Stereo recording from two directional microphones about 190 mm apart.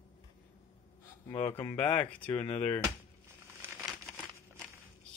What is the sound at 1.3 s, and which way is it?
Speech, 25° left (ahead or behind).